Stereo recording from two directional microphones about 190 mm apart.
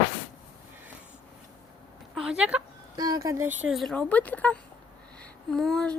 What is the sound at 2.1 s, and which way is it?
Speech, 5° right (ahead or behind).